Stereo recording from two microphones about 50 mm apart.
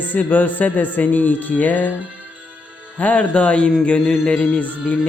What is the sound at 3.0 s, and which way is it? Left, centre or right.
Speech, left.